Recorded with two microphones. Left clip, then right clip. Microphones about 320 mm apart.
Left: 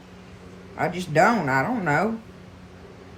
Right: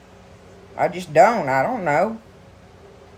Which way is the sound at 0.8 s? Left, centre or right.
Centre.